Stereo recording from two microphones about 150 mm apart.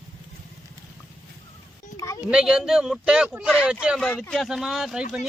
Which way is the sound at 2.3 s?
5° right (ahead or behind).